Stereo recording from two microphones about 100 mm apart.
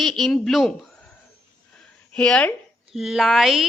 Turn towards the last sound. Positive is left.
turn(degrees=-5)  # may be behind; listen again after turning